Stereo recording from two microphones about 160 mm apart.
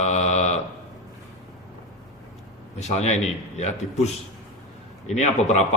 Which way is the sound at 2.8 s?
45° left (ahead or behind).